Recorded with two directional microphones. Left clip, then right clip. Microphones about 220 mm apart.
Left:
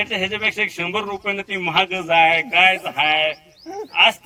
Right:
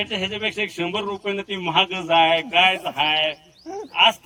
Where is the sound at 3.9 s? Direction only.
15° left (ahead or behind).